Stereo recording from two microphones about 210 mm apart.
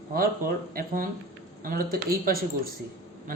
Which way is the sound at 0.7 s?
40° right (ahead or behind).